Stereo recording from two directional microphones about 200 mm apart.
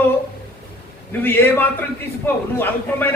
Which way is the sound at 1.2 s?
10° left (ahead or behind).